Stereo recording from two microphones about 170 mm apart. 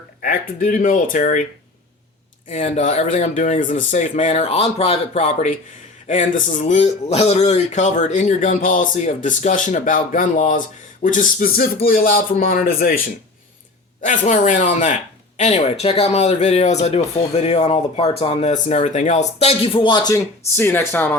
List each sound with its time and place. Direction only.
0.2 s speech: 55° left (ahead or behind)
2.5 s speech: 40° left (ahead or behind); by 13.0 s 60° left (ahead or behind)
14.0 s speech: 50° left (ahead or behind); by 20.1 s 25° left (ahead or behind)
20.1 s speech: 15° left (ahead or behind)